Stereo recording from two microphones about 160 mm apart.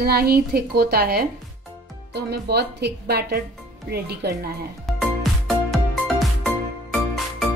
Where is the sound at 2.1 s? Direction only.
90° right.